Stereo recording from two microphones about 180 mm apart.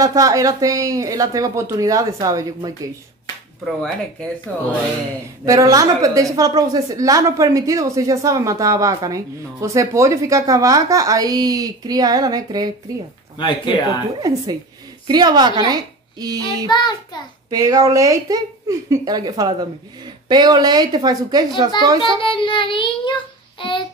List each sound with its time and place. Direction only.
0.0 s a woman's voice: 20° right (ahead or behind)
3.6 s speech: 5° left (ahead or behind)
5.4 s a woman's voice: 20° right (ahead or behind)
13.4 s child singing: 25° left (ahead or behind)
14.2 s a woman's voice: 20° right (ahead or behind)
16.6 s child singing: 25° left (ahead or behind)
17.5 s a woman's voice: 20° right (ahead or behind)
22.0 s child singing: 30° left (ahead or behind)